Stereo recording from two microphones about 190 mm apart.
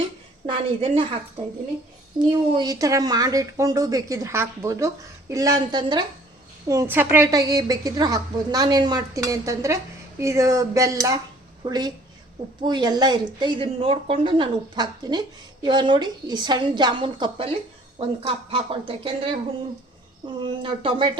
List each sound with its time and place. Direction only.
0.4 s a woman's voice: 25° right (ahead or behind)
2.5 s a woman's voice: 20° right (ahead or behind)